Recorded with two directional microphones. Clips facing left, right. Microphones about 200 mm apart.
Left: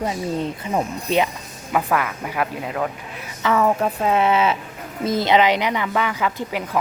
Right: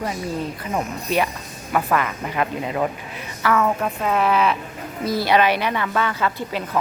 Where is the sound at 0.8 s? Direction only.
20° left (ahead or behind).